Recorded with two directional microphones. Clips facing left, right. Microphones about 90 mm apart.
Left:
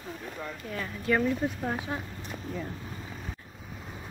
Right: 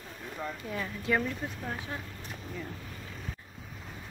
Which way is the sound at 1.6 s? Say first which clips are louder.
Left 5 dB; 25° left (ahead or behind).